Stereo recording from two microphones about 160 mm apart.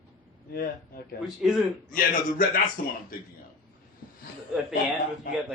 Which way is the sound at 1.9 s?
60° left (ahead or behind).